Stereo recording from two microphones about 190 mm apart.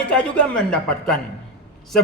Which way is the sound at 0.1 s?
5° left (ahead or behind).